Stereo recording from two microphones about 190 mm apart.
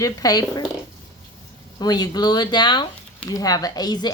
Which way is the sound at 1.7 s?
20° left (ahead or behind).